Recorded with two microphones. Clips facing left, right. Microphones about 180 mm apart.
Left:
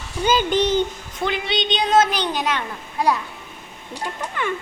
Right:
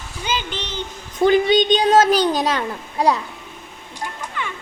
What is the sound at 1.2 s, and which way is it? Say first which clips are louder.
A child's voice: right 9 dB; 40° right (ahead or behind).